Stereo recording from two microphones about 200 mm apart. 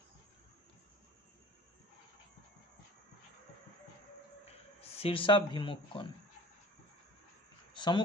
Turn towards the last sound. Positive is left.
turn(degrees=25)  # may be behind; listen again after turning